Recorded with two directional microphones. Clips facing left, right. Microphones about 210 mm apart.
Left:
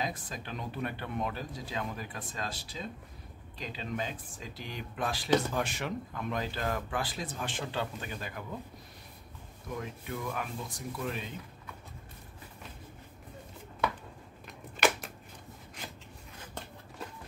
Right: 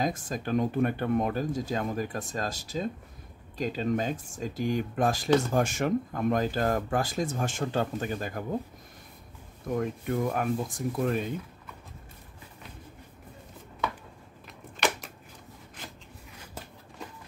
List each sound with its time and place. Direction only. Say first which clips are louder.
0.0 s speech: right 7 dB; 45° right (ahead or behind)
9.7 s speech: right 9 dB; 50° right (ahead or behind)
14.8 s scissors: left 1 dB; centre (ahead or behind)